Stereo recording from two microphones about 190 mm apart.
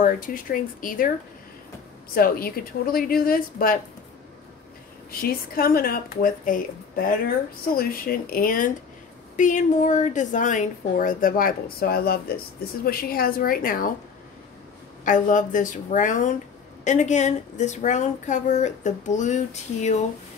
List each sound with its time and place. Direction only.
0.0 s a woman's voice: 45° left (ahead or behind)
2.1 s a woman's voice: 50° left (ahead or behind)
5.2 s a woman's voice: 50° left (ahead or behind)
15.0 s speech: 40° left (ahead or behind)